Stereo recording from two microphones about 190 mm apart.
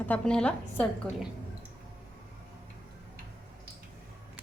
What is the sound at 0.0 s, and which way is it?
A woman's voice, 5° left (ahead or behind).